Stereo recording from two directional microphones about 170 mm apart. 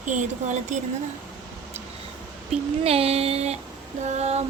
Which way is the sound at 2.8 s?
35° right (ahead or behind).